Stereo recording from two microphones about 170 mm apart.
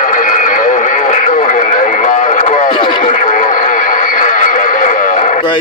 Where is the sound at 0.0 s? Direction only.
50° left (ahead or behind).